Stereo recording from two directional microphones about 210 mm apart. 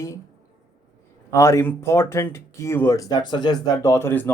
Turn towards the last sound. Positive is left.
turn(degrees=10)  # may be behind; listen again after turning